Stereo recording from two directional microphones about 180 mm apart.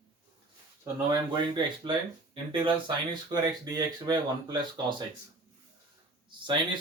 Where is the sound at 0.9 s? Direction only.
25° right (ahead or behind).